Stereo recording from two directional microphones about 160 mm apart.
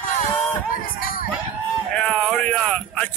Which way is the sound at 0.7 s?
65° left (ahead or behind).